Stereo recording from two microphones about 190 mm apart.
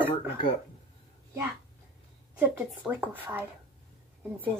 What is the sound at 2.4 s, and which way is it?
Speech, 10° right (ahead or behind).